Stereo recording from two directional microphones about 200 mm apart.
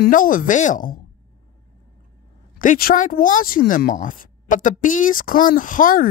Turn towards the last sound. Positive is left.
turn(degrees=40)  # may be behind; listen again after turning